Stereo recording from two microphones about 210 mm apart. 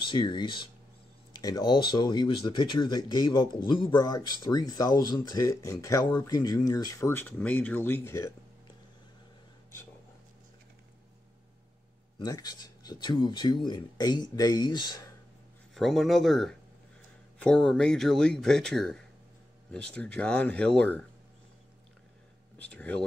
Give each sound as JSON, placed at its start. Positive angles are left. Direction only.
{"t": 0.0, "sound": "speech", "side_deg": 20}
{"t": 12.2, "sound": "speech", "side_deg": 20}
{"t": 15.7, "sound": "speech", "side_deg": 0}
{"t": 22.6, "sound": "speech", "side_deg": 5}